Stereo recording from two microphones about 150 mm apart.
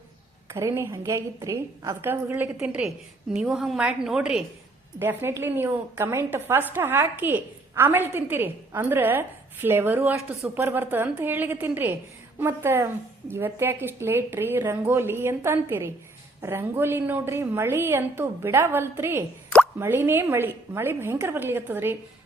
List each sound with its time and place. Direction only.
0.4 s a woman's voice: 20° right (ahead or behind); by 4.4 s 5° right (ahead or behind)
4.9 s a woman's voice: 15° right (ahead or behind)